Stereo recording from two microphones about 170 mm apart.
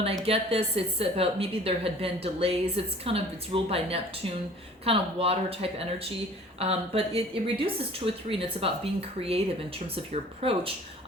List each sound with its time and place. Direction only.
0.0 s a woman's voice: 35° right (ahead or behind)